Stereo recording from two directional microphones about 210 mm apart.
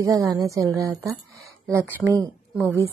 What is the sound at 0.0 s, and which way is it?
Speech, 15° right (ahead or behind).